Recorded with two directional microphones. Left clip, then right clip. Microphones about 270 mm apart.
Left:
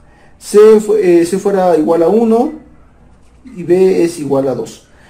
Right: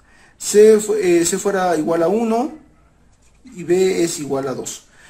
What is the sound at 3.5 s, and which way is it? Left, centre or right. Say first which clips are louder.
Speech: left 6 dB; right.